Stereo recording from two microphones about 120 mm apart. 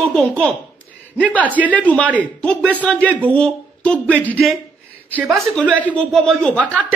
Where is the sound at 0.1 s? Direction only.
10° left (ahead or behind).